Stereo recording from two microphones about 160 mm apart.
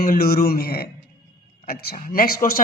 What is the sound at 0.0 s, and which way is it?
A man's voice, 65° left (ahead or behind).